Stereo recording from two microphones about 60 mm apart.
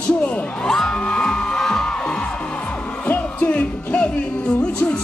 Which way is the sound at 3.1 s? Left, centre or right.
Left.